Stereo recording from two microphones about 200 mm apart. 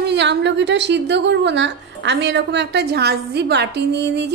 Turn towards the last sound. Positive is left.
turn(degrees=-60)  # may be behind; listen again after turning